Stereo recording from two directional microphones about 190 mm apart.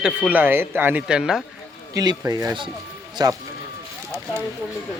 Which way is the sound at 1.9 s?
20° right (ahead or behind).